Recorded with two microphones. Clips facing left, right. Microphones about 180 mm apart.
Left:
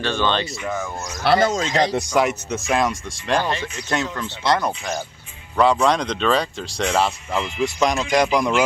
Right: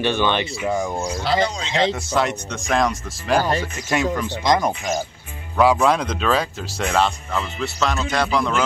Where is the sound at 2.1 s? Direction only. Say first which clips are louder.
Left 2 dB; 5° left (ahead or behind); by 4.7 s 15° right (ahead or behind).